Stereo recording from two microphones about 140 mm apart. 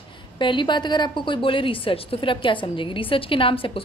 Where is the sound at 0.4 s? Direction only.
35° left (ahead or behind).